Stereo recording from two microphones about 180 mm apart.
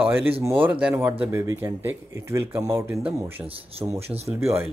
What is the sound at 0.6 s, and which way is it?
Speech, 10° right (ahead or behind).